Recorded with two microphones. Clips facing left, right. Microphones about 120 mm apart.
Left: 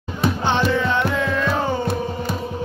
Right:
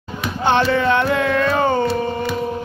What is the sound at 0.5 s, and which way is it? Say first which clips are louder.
Music: right 6 dB; 60° right (ahead or behind).